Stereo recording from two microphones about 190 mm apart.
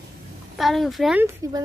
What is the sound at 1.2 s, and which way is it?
Speech, 15° right (ahead or behind).